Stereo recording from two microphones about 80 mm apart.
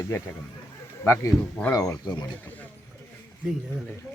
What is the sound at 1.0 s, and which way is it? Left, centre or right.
Speech, left.